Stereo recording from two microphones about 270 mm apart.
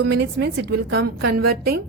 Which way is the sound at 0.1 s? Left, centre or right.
Right.